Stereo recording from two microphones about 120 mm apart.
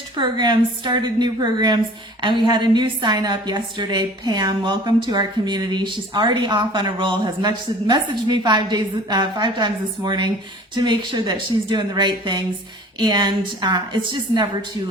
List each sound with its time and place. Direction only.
0.2 s a woman's voice: 40° right (ahead or behind)